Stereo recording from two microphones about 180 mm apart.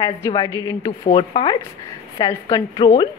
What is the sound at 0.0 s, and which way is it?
A woman's voice, 25° left (ahead or behind).